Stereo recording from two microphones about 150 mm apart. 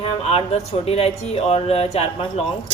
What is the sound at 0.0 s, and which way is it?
Speech, 40° left (ahead or behind).